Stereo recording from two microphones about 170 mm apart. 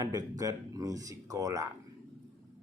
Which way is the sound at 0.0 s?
20° right (ahead or behind).